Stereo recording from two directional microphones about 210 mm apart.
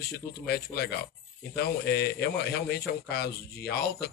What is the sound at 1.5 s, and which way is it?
A man's voice, 50° left (ahead or behind).